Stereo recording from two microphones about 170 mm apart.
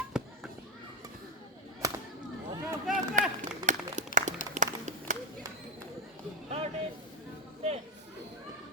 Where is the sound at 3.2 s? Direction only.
50° right (ahead or behind).